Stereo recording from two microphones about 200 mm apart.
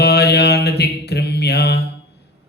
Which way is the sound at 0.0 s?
55° left (ahead or behind).